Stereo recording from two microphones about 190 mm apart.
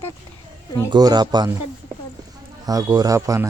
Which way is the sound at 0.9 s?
20° right (ahead or behind).